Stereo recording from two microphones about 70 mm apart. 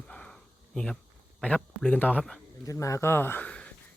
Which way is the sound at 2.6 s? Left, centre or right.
Left.